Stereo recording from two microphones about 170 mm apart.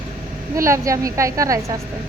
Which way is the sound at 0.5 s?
15° right (ahead or behind).